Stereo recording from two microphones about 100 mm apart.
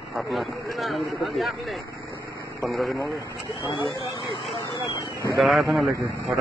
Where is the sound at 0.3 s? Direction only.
Centre (ahead or behind).